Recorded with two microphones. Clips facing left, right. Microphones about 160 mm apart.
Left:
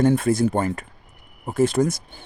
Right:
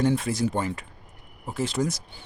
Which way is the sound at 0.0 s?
50° left (ahead or behind).